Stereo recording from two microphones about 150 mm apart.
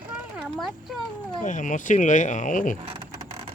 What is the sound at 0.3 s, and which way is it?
Speech, centre (ahead or behind).